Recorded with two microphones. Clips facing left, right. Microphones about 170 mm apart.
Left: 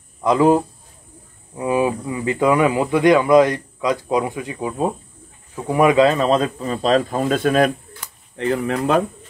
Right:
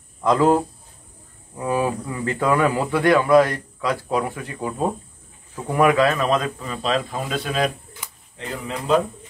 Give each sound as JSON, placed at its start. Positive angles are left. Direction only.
{"t": 0.2, "sound": "speech", "side_deg": 15}
{"t": 1.6, "sound": "speech", "side_deg": 15}
{"t": 8.4, "sound": "speech", "side_deg": 65}